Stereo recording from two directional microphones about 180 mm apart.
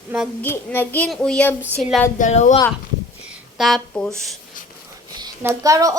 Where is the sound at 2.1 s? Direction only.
45° left (ahead or behind).